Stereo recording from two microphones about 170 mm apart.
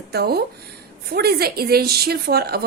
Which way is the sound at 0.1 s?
70° right (ahead or behind).